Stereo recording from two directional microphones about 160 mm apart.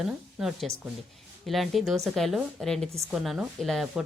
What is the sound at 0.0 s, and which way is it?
Speech, centre (ahead or behind).